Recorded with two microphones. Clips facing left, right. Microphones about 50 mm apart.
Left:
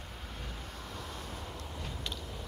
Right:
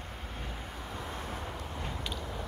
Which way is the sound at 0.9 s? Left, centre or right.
Right.